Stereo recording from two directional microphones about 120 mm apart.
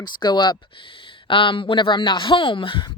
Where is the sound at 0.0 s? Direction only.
40° left (ahead or behind).